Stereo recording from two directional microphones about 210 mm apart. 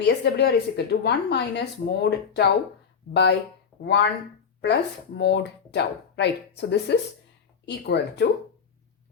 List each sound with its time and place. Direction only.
0.0 s a woman's voice: 50° left (ahead or behind)
4.6 s a woman's voice: 55° left (ahead or behind)